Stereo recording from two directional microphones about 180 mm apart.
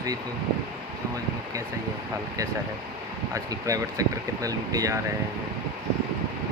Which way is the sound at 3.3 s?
20° right (ahead or behind).